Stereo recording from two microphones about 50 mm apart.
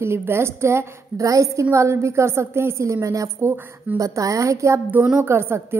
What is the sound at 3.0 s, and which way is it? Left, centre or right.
A woman's voice, right.